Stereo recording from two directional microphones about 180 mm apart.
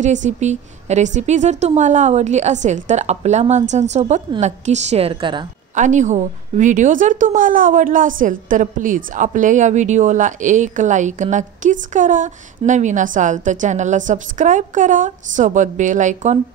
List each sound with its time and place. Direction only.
0.0 s a woman's voice: 45° right (ahead or behind); by 5.5 s 25° right (ahead or behind)
5.8 s a woman's voice: 40° right (ahead or behind)